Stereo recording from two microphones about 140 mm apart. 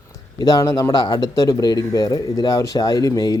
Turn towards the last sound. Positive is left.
turn(degrees=30)  # may be behind; listen again after turning